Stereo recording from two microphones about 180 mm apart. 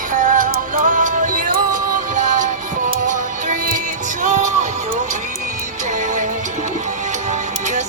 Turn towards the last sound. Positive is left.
turn(degrees=-40)  # may be behind; listen again after turning